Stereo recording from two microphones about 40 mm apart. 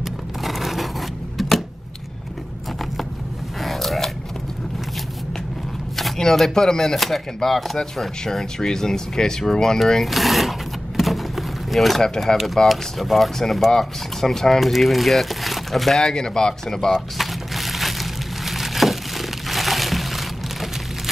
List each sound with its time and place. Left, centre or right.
0.4 s a sound: centre
3.6 s a sound: centre
6.1 s speech: centre
10.0 s speech: centre
11.0 s vehicle: centre
12.6 s speech: centre
16.0 s speech: centre
16.9 s crumpling: centre